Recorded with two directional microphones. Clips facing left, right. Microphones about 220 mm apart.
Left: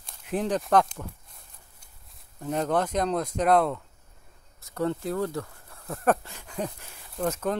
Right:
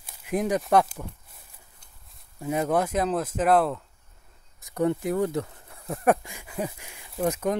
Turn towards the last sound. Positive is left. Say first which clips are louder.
# right 2 dB
turn(degrees=-15)  # may be behind; listen again after turning